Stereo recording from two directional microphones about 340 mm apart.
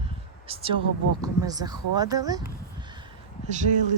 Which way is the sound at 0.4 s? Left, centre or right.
Centre.